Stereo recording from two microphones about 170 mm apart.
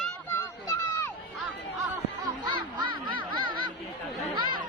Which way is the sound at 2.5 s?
30° right (ahead or behind).